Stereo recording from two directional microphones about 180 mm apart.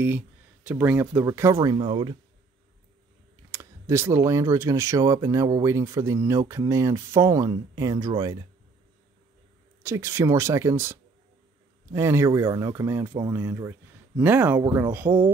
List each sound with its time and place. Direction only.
0.7 s speech: 10° right (ahead or behind); by 2.1 s 30° right (ahead or behind)
3.5 s speech: 15° right (ahead or behind)
9.8 s speech: 15° right (ahead or behind)